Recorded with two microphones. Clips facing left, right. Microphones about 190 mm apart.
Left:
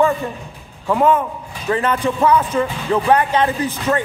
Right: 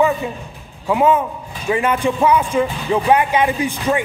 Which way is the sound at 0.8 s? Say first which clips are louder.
Even; 10° right (ahead or behind).